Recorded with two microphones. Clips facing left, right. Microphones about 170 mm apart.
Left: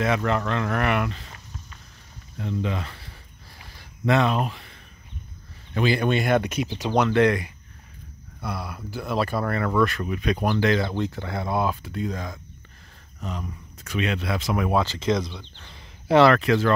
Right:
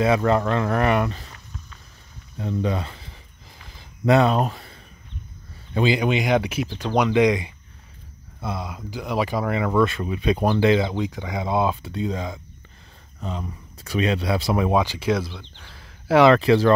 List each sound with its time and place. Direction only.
0.0 s speech: 30° right (ahead or behind)
2.3 s speech: 35° right (ahead or behind)
4.0 s speech: 35° right (ahead or behind)
5.8 s speech: 15° right (ahead or behind)
6.7 s speech: 5° left (ahead or behind)
7.0 s speech: 15° right (ahead or behind)
13.2 s speech: 30° right (ahead or behind)
14.7 s speech: 15° right (ahead or behind)
16.3 s speech: 30° right (ahead or behind)